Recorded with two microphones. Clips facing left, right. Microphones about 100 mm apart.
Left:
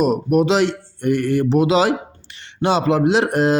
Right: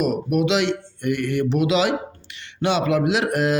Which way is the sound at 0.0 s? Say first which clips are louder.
Left 4 dB; 35° left (ahead or behind).